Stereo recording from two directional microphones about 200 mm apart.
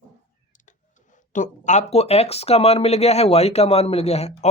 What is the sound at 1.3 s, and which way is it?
Speech, 40° left (ahead or behind).